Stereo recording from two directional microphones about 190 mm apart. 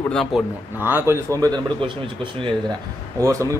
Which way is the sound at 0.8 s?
10° right (ahead or behind).